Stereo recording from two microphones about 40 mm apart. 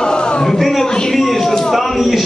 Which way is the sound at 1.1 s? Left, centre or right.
Centre.